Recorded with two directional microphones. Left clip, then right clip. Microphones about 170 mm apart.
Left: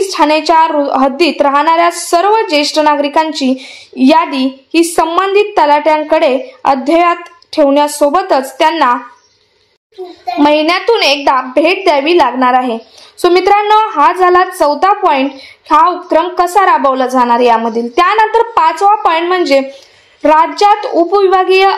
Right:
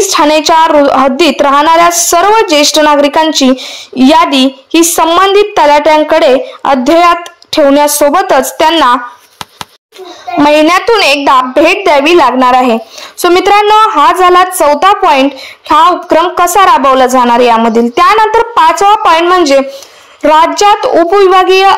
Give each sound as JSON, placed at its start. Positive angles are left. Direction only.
{"t": 0.0, "sound": "a woman's voice", "side_deg": -30}
{"t": 10.4, "sound": "a woman's voice", "side_deg": -25}